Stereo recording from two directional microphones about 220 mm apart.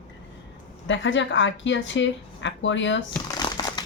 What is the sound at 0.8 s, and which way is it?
A woman's voice, 55° left (ahead or behind).